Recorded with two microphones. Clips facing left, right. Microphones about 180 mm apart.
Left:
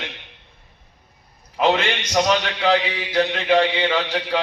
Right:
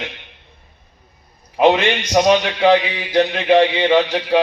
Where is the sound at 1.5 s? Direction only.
15° right (ahead or behind).